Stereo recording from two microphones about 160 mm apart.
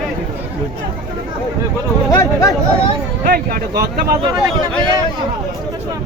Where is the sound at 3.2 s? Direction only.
70° right (ahead or behind).